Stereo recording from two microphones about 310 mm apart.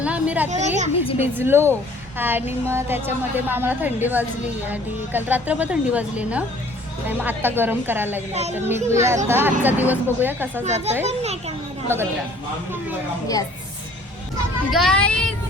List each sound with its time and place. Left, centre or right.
0.0 s a sound: centre
0.5 s a child's voice: right
0.9 s a woman's voice: centre
1.4 s a woman's voice: centre
8.3 s a child's voice: right
8.5 s speech: centre
10.6 s a child's voice: right
14.7 s speech: centre